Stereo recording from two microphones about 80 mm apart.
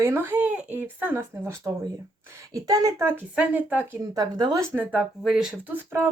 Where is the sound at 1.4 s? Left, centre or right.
Right.